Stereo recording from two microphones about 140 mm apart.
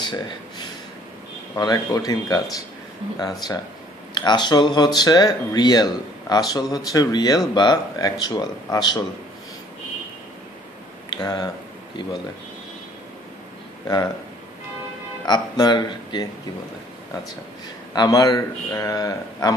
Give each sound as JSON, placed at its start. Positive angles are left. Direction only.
{"t": 0.0, "sound": "a sound", "side_deg": 30}
{"t": 1.5, "sound": "speech", "side_deg": 25}
{"t": 11.1, "sound": "speech", "side_deg": 30}
{"t": 15.2, "sound": "speech", "side_deg": 30}
{"t": 17.9, "sound": "speech", "side_deg": 30}